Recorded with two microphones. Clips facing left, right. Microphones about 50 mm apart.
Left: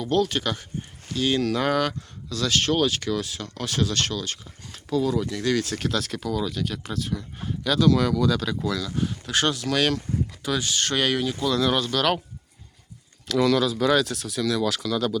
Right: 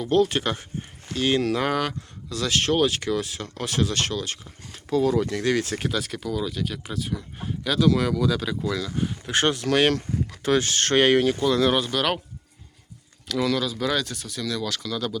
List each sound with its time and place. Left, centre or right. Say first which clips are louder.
0.0 s speech: right 2 dB; right
1.5 s speech: left 1 dB; centre
2.3 s speech: even; right
5.8 s speech: left 1 dB; centre; by 9.9 s right
10.4 s speech: right 6 dB; right
11.3 s speech: right 2 dB; right
13.2 s speech: left 4 dB; centre